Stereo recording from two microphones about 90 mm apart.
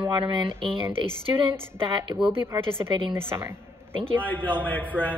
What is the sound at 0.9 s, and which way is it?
Speech, 80° right.